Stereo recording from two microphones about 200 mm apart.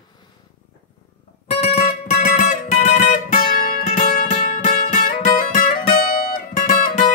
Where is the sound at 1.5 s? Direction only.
30° left (ahead or behind).